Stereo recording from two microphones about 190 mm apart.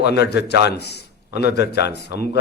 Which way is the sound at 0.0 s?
60° left (ahead or behind).